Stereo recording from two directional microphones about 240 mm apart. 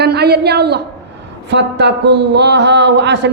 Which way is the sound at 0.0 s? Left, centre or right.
Right.